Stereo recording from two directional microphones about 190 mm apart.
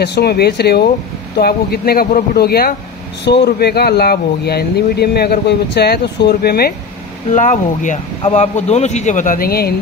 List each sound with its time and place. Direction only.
0.0 s speech: 60° left (ahead or behind)
7.3 s speech: 40° left (ahead or behind)